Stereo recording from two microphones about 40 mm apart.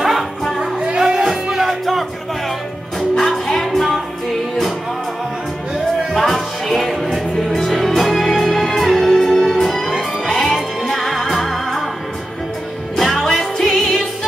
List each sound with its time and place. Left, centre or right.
0.0 s music: centre
0.7 s music: right; by 2.0 s centre
3.2 s music: centre
6.1 s music: centre
12.9 s music: centre